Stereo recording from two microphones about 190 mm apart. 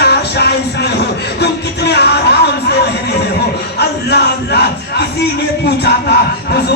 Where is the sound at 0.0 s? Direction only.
60° left (ahead or behind).